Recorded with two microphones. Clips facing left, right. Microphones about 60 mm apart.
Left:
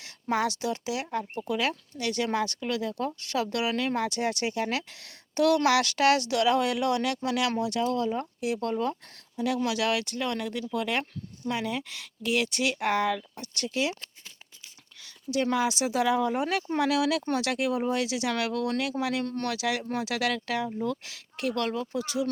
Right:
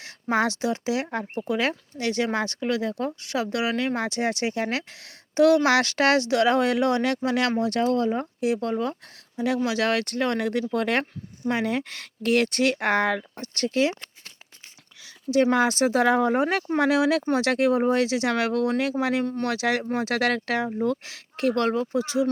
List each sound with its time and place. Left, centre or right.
0.0 s speech: right
9.6 s speech: right
15.5 s speech: right
19.2 s speech: centre
19.5 s speech: right